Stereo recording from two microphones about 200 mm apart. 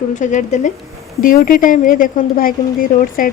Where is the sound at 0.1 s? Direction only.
40° left (ahead or behind).